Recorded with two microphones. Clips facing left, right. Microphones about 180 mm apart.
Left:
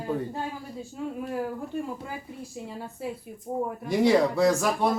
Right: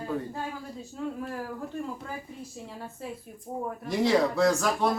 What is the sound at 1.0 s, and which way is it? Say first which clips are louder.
Speech: even; 10° left (ahead or behind).